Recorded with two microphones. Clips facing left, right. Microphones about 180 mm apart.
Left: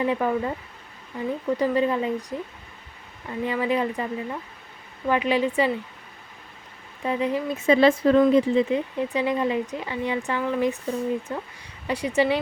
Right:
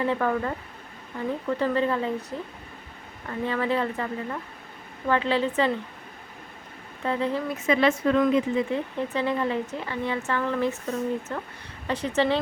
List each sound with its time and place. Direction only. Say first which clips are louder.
0.0 s speech: left 1 dB; 15° left (ahead or behind)
7.0 s speech: left 2 dB; 15° left (ahead or behind)
7.5 s speech: left 6 dB; 30° left (ahead or behind)
8.7 s speech: left 3 dB; 15° left (ahead or behind)